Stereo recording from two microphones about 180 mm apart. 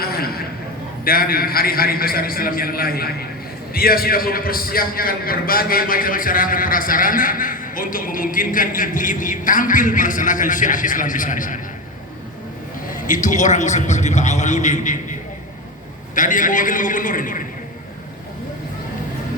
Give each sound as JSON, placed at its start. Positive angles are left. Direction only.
{"t": 0.0, "sound": "a sound", "side_deg": 55}
{"t": 1.0, "sound": "a man's voice", "side_deg": 55}
{"t": 12.9, "sound": "a man's voice", "side_deg": 45}